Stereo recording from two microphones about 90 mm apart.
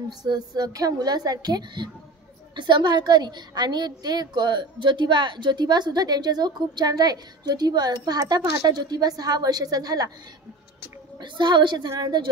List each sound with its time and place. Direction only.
0.2 s a woman's voice: 45° right (ahead or behind)
11.1 s a woman's voice: 55° right (ahead or behind)